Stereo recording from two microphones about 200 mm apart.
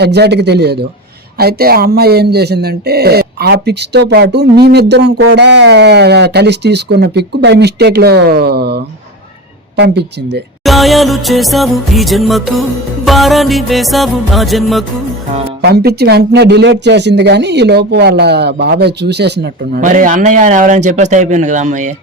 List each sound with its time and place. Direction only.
0.0 s speech: 55° right (ahead or behind)
10.6 s music: centre (ahead or behind)
15.6 s speech: 55° right (ahead or behind)
19.8 s a man's voice: 40° right (ahead or behind)